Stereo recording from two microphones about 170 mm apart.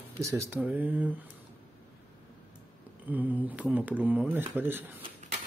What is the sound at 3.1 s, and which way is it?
Speech, 10° right (ahead or behind).